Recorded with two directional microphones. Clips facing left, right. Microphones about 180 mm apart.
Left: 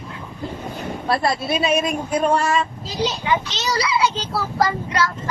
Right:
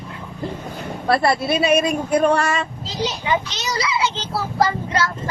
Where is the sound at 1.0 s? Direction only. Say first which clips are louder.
Right 3 dB; 65° right (ahead or behind).